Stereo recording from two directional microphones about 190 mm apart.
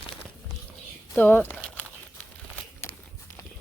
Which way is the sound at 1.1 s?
10° left (ahead or behind).